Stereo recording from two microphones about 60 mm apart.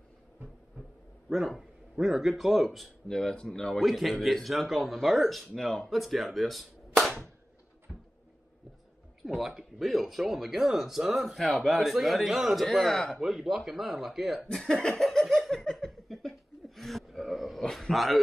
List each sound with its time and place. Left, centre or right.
1.3 s a man's voice: centre
3.1 s speech: centre
3.8 s speech: centre
5.6 s speech: centre
5.9 s speech: centre
7.9 s a sound: centre
9.2 s speech: centre
13.2 s speech: centre
14.6 s a sound: centre